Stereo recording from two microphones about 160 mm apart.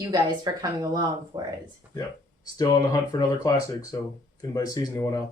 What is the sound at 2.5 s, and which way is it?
Speech, 25° left (ahead or behind).